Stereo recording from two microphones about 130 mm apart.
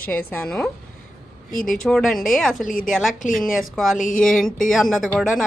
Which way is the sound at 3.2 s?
90° left.